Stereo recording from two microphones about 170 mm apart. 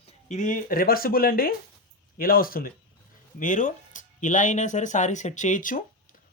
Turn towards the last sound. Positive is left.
turn(degrees=50)  # may be behind; listen again after turning